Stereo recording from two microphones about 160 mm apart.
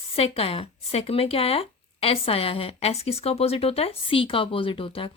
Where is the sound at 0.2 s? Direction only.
35° left (ahead or behind).